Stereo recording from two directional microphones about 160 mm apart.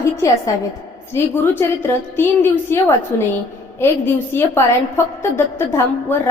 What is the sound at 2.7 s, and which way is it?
Speech, 15° left (ahead or behind).